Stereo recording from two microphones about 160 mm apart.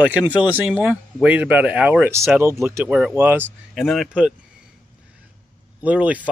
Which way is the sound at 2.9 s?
5° right (ahead or behind).